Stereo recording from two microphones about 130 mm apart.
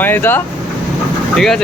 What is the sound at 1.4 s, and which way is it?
Speech, 5° left (ahead or behind).